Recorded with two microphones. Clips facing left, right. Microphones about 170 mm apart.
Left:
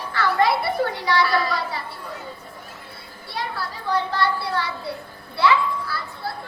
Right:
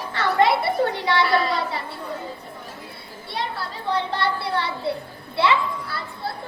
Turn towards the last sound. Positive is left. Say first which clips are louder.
# left 1 dB
turn(degrees=-25)  # may be behind; listen again after turning